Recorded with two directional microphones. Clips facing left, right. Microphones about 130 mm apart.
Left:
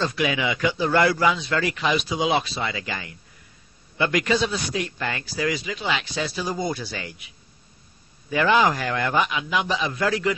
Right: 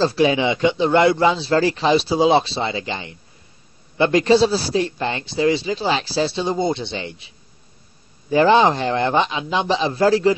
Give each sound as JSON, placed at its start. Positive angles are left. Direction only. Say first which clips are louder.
{"t": 0.0, "sound": "a man's voice", "louder": "right 7 dB", "side_deg": -30}